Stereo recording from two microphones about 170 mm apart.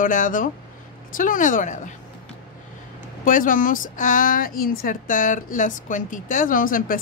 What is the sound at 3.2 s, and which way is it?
Speech, 50° left (ahead or behind).